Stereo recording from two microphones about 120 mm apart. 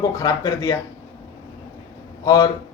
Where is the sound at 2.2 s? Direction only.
30° left (ahead or behind).